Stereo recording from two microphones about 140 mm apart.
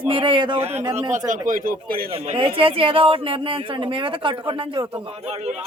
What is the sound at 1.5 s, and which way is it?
Speech, 75° right (ahead or behind).